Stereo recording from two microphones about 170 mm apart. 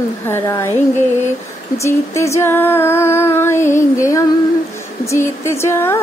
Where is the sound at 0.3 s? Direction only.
15° left (ahead or behind).